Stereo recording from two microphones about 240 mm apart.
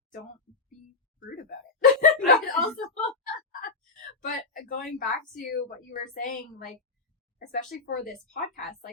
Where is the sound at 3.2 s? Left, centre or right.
Left.